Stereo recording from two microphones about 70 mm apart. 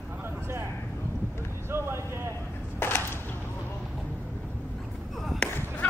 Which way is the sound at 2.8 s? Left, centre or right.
Left.